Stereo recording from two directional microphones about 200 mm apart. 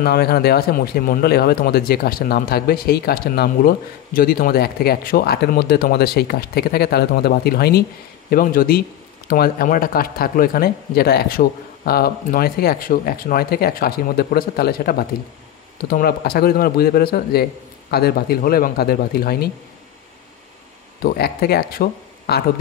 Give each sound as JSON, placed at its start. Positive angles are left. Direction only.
{"t": 0.0, "sound": "speech", "side_deg": 50}
{"t": 21.0, "sound": "speech", "side_deg": 50}